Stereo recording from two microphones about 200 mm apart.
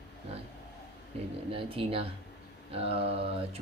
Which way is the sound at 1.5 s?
25° right (ahead or behind).